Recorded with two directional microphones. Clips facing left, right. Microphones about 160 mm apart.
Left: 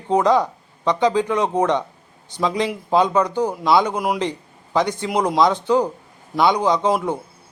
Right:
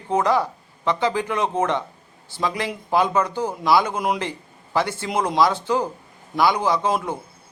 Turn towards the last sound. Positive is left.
turn(degrees=20)  # may be behind; listen again after turning